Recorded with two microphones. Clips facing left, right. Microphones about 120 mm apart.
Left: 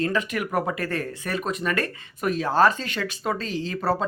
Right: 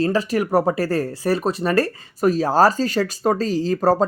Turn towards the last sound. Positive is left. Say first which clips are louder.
# right 8 dB
turn(degrees=-40)  # may be behind; listen again after turning